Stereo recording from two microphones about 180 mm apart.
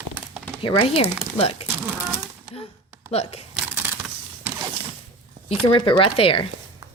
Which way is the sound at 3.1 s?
35° left (ahead or behind).